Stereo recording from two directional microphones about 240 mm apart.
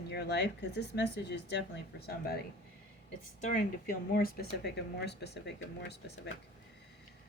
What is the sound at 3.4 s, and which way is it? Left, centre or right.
Speech, left.